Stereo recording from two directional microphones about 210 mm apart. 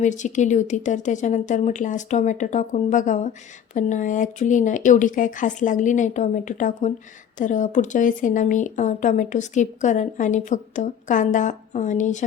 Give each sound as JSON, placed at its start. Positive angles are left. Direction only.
{"t": 0.0, "sound": "speech", "side_deg": 35}